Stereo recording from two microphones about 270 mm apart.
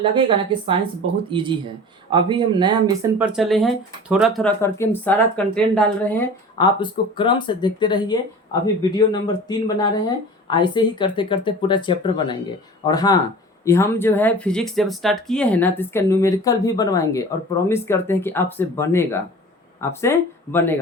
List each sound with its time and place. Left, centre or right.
0.0 s speech: centre
3.2 s speech: centre
6.7 s speech: centre